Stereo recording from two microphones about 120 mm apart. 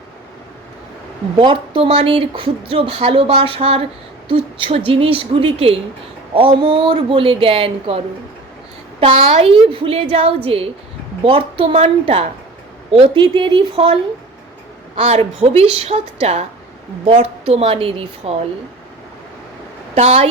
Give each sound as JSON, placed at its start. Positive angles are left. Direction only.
{"t": 1.4, "sound": "a woman's voice", "side_deg": -45}
{"t": 20.0, "sound": "a woman's voice", "side_deg": -55}